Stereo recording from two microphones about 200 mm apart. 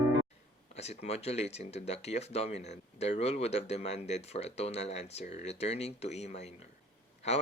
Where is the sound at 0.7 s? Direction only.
35° left (ahead or behind).